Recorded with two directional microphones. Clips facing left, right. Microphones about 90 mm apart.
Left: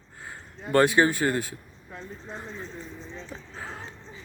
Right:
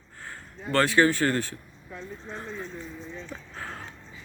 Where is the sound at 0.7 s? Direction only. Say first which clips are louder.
Left 1 dB; 15° left (ahead or behind); by 2.6 s centre (ahead or behind).